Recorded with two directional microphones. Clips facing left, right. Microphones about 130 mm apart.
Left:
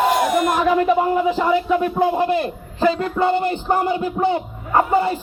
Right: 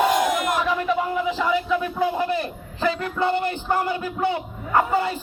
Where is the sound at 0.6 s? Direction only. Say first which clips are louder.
Left 7 dB; 50° left (ahead or behind); by 3.1 s 30° left (ahead or behind).